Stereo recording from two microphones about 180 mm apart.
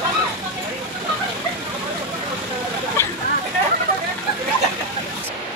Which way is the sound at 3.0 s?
15° left (ahead or behind).